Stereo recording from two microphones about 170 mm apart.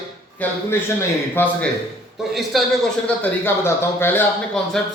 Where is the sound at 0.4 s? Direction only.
10° left (ahead or behind).